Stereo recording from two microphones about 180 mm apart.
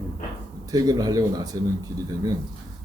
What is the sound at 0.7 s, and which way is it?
Speech, 20° right (ahead or behind).